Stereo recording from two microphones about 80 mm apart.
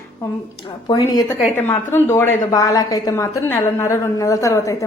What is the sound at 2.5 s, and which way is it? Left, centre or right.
Speech, left.